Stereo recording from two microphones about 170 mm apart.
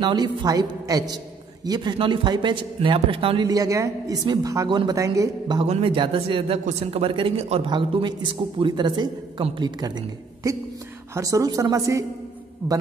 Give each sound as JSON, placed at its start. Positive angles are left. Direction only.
{"t": 0.0, "sound": "a man's voice", "side_deg": -25}
{"t": 3.4, "sound": "a man's voice", "side_deg": -20}
{"t": 5.6, "sound": "a man's voice", "side_deg": -35}